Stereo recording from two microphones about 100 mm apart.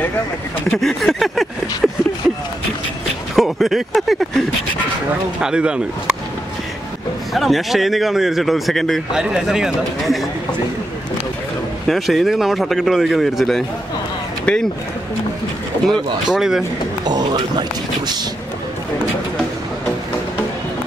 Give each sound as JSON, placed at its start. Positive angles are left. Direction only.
{"t": 0.7, "sound": "a sound", "side_deg": 5}
{"t": 5.4, "sound": "speech", "side_deg": -10}
{"t": 7.3, "sound": "a man's voice", "side_deg": 0}
{"t": 11.9, "sound": "a man's voice", "side_deg": 0}
{"t": 16.3, "sound": "a man's voice", "side_deg": -5}
{"t": 17.0, "sound": "speech", "side_deg": -45}